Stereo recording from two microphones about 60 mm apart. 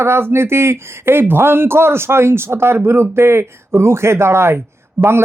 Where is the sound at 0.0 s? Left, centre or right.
Right.